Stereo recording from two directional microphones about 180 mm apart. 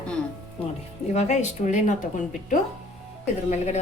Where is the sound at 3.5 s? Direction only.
40° left (ahead or behind).